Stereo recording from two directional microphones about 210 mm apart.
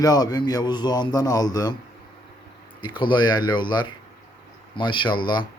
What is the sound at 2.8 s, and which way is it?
Speech, 20° left (ahead or behind).